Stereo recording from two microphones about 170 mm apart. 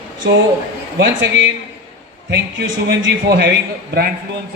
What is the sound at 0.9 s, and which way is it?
Speech, 90° right.